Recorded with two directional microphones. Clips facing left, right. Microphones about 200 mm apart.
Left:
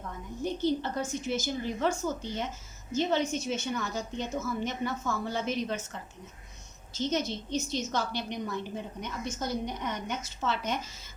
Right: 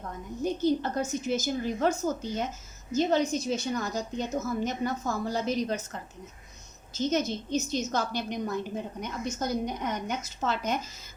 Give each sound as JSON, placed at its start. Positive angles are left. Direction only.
{"t": 0.6, "sound": "a woman's voice", "side_deg": -45}
{"t": 6.9, "sound": "a woman's voice", "side_deg": -40}